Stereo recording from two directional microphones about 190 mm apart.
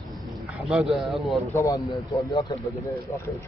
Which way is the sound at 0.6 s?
Centre (ahead or behind).